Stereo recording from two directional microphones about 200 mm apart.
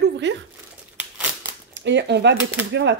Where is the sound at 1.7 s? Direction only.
60° right (ahead or behind).